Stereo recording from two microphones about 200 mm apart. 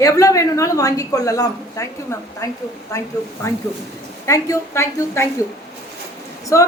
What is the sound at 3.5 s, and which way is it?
A woman's voice, 15° left (ahead or behind).